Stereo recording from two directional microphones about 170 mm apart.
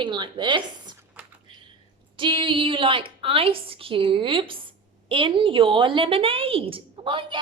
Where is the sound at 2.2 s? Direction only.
30° right (ahead or behind).